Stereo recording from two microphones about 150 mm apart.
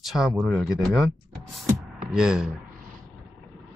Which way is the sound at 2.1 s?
5° right (ahead or behind).